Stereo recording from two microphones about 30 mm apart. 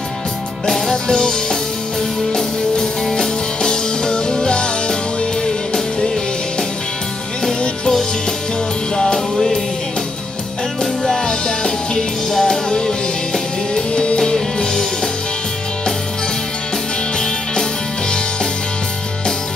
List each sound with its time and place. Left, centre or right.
0.8 s music: left
3.1 s music: left
8.9 s music: centre
10.8 s music: centre
11.2 s music: left